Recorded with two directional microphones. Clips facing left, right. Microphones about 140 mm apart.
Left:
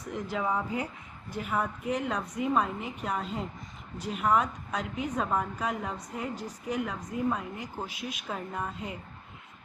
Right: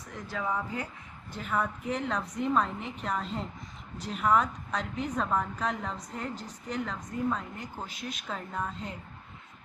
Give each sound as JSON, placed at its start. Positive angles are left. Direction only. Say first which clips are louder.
{"t": 0.1, "sound": "a woman's voice", "louder": "left 3 dB", "side_deg": 20}